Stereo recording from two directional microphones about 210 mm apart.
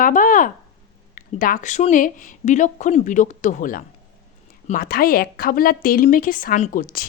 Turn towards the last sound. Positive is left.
turn(degrees=40)  # may be behind; listen again after turning